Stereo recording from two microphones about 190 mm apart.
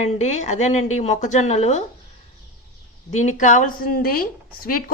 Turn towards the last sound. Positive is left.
turn(degrees=50)  # may be behind; listen again after turning